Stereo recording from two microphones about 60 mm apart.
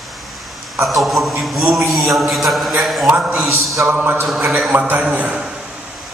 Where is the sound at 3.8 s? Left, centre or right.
Right.